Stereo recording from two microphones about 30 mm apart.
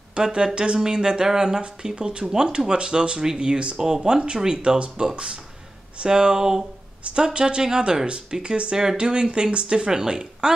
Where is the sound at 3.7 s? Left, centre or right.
Centre; by 5.4 s right.